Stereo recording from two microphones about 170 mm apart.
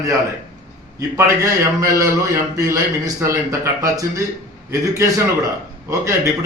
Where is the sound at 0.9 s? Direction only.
15° right (ahead or behind).